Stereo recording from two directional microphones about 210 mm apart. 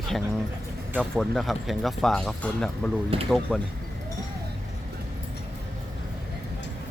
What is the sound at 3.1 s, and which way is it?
Speech, 25° right (ahead or behind).